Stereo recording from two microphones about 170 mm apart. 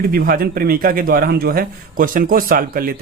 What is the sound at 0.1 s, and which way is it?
A man's voice, 60° right (ahead or behind).